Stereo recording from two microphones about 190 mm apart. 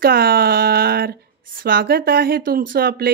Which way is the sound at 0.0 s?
50° right (ahead or behind).